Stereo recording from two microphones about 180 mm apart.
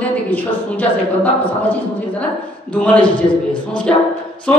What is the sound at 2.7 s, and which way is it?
Speech, 5° left (ahead or behind).